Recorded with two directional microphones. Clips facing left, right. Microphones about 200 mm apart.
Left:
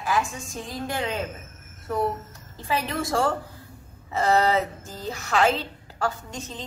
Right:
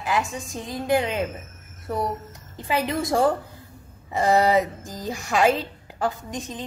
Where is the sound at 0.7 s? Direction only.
20° right (ahead or behind).